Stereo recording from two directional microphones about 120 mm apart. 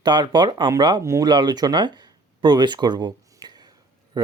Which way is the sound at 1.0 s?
25° right (ahead or behind).